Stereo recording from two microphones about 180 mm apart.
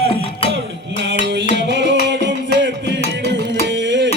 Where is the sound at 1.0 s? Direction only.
85° right.